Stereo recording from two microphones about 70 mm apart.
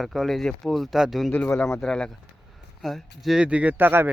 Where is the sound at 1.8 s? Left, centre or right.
Centre.